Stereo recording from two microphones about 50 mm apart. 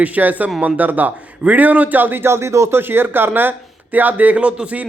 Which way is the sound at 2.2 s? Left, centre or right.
Right.